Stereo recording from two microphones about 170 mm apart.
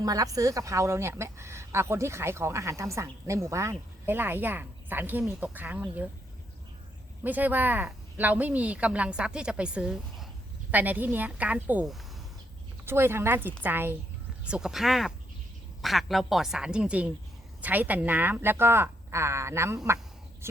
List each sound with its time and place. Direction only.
0.0 s a woman's voice: 20° right (ahead or behind)
7.3 s a woman's voice: 10° right (ahead or behind)